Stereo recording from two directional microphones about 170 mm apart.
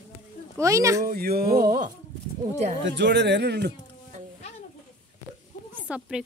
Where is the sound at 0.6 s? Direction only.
20° right (ahead or behind).